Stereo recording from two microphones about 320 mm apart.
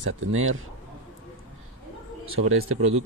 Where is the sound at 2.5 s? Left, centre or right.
Right.